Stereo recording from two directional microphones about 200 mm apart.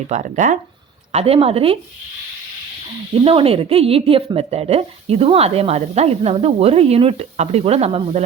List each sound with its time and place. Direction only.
0.1 s speech: 40° right (ahead or behind)
3.2 s speech: 25° right (ahead or behind)